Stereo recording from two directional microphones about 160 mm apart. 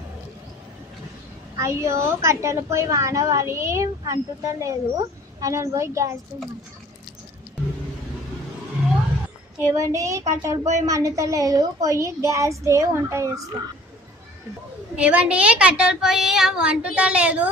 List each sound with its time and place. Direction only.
1.5 s a woman's voice: 20° right (ahead or behind)
9.6 s a woman's voice: 20° right (ahead or behind)
14.9 s a woman's voice: 10° right (ahead or behind)